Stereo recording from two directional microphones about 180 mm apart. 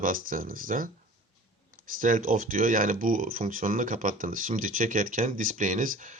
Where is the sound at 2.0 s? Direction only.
50° right (ahead or behind).